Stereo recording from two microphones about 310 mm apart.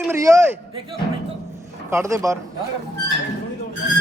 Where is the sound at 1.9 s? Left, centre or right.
Centre.